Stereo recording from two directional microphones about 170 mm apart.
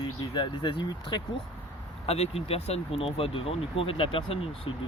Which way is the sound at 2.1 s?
35° left (ahead or behind).